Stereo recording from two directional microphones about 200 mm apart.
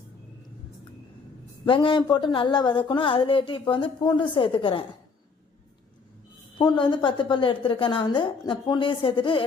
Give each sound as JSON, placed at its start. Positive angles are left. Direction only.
{"t": 1.6, "sound": "a woman's voice", "side_deg": 25}
{"t": 6.6, "sound": "a woman's voice", "side_deg": 20}